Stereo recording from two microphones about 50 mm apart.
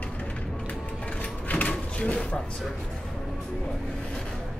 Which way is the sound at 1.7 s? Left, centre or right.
Centre.